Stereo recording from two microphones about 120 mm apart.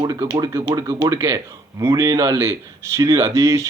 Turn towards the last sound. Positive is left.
turn(degrees=-25)  # may be behind; listen again after turning